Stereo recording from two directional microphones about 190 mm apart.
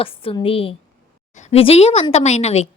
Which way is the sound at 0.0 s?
30° left (ahead or behind).